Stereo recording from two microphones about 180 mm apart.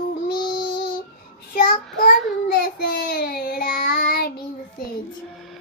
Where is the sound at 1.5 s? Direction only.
50° left (ahead or behind).